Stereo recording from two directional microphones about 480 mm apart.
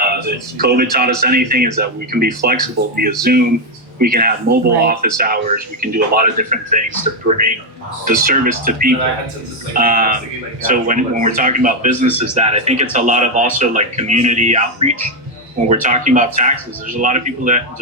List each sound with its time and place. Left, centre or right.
0.6 s speech: centre